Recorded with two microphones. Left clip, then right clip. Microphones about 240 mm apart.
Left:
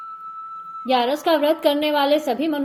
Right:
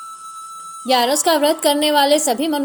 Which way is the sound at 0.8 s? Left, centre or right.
Right.